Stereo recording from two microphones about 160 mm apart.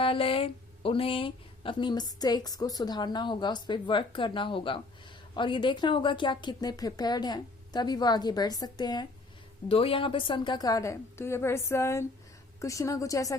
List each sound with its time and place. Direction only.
0.0 s a woman's voice: 35° left (ahead or behind)